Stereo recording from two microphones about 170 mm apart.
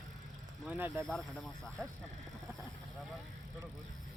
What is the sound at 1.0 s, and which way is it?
Speech, 5° left (ahead or behind).